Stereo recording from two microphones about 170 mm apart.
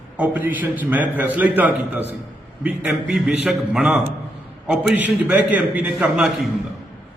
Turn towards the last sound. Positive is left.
turn(degrees=-5)  # may be behind; listen again after turning